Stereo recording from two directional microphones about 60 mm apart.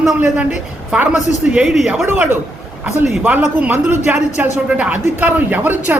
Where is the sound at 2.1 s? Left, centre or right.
Right.